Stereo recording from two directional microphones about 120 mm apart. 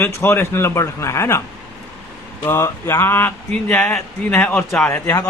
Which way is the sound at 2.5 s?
20° left (ahead or behind).